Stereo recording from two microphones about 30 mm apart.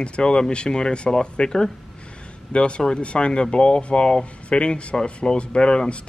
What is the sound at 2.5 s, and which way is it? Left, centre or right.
Speech, left.